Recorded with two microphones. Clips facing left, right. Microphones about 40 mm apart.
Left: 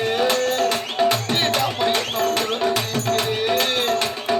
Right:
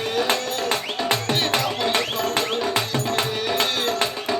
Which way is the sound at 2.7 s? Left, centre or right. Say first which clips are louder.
Left 1 dB; right.